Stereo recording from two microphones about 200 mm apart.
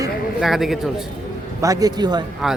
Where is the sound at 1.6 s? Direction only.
15° right (ahead or behind).